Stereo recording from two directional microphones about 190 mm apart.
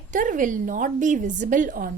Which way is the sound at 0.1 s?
45° right (ahead or behind).